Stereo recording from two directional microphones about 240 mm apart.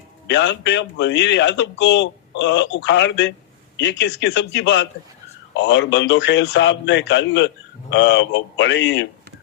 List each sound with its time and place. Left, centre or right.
0.3 s a man's voice: left